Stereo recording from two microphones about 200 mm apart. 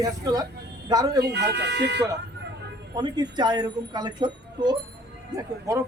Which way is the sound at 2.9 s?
20° right (ahead or behind).